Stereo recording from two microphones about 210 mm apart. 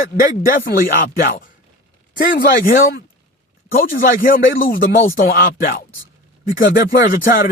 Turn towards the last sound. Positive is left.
turn(degrees=45)  # may be behind; listen again after turning